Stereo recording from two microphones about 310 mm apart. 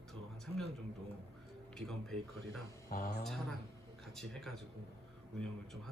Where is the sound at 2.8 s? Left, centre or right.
Left.